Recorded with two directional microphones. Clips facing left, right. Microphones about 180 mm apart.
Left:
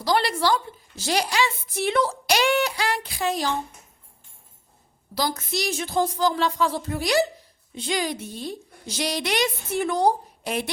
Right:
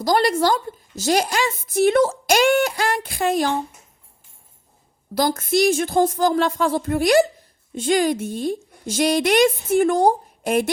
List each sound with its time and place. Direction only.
0.0 s a woman's voice: 45° right (ahead or behind)
5.1 s a woman's voice: 50° right (ahead or behind)